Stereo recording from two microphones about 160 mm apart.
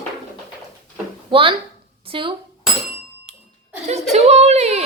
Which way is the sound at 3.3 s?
40° right (ahead or behind).